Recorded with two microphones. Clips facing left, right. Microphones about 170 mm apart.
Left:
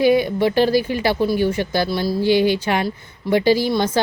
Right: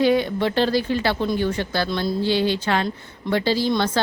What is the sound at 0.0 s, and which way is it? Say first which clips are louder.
Speech: left 3 dB; 10° left (ahead or behind).